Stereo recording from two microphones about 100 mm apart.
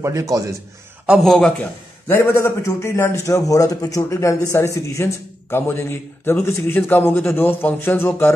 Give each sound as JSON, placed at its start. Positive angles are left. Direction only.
{"t": 0.0, "sound": "a man's voice", "side_deg": -35}
{"t": 1.2, "sound": "a man's voice", "side_deg": 5}
{"t": 1.6, "sound": "a man's voice", "side_deg": 25}